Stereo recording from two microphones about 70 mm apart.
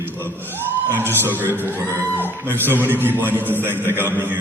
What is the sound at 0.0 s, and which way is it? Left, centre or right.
A man's voice, right.